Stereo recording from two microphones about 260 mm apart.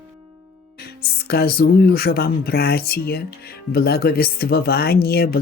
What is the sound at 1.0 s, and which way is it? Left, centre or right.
Speech, left.